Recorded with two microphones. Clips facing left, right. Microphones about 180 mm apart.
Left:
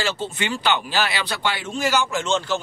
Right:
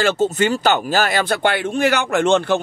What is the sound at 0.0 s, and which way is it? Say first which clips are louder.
Speech: right 9 dB; 50° right (ahead or behind).